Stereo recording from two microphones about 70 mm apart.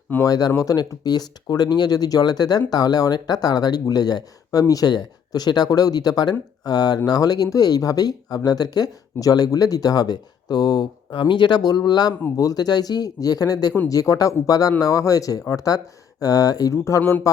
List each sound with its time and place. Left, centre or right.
0.3 s speech: left
16.7 s speech: left